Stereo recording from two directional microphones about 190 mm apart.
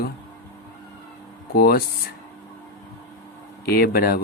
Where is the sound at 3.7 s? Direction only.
55° left (ahead or behind).